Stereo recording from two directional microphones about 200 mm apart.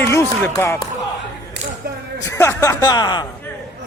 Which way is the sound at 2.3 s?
15° left (ahead or behind).